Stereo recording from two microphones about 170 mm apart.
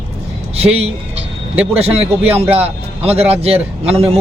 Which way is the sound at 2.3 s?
10° right (ahead or behind).